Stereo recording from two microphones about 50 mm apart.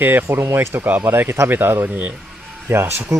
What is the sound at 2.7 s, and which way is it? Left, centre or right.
Speech, right.